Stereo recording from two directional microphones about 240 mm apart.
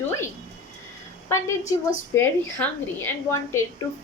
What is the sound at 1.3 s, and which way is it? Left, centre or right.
A woman's voice, centre.